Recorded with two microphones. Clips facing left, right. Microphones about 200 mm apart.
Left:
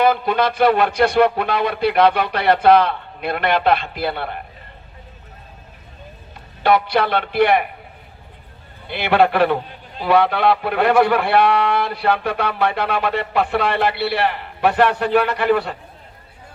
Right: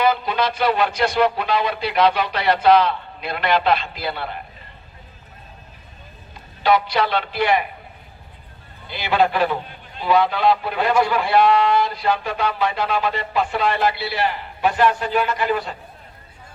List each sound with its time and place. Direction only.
0.0 s a man's voice: 55° left (ahead or behind)
6.6 s a man's voice: 55° left (ahead or behind)
8.9 s a man's voice: 60° left (ahead or behind)